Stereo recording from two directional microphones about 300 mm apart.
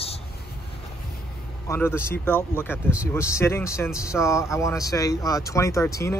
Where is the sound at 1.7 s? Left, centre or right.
Centre.